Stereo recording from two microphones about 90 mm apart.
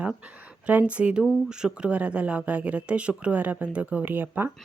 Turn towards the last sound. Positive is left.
turn(degrees=-20)  # may be behind; listen again after turning